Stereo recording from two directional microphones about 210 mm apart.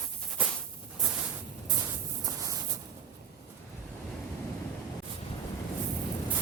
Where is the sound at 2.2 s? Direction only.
15° right (ahead or behind).